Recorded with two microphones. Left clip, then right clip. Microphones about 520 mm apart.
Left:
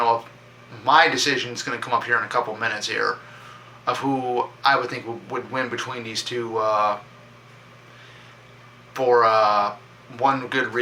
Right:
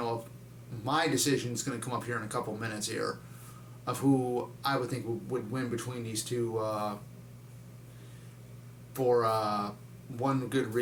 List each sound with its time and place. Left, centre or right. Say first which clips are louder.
0.9 s speech: left 12 dB; right
8.9 s speech: left 10 dB; right